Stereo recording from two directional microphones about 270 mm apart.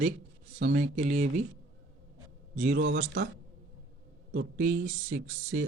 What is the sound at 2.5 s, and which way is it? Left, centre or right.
Speech, right.